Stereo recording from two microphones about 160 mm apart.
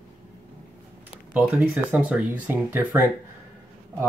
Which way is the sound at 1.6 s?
10° right (ahead or behind).